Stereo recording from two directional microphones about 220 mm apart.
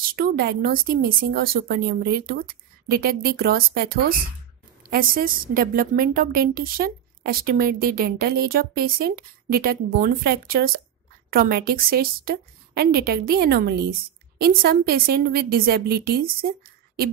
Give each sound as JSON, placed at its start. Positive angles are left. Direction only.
{"t": 0.0, "sound": "a woman's voice", "side_deg": -40}